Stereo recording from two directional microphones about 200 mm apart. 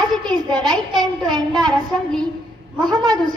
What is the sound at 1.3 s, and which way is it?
Speech, 20° right (ahead or behind).